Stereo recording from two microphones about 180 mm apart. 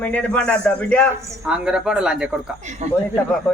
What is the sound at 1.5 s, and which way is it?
Speech, 5° right (ahead or behind).